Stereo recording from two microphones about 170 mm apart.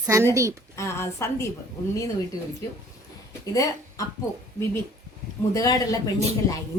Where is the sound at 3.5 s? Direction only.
20° left (ahead or behind).